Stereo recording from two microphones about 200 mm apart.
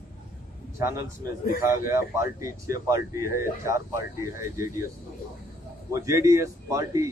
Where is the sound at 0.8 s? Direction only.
15° right (ahead or behind).